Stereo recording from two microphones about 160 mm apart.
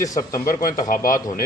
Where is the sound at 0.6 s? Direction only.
60° left (ahead or behind).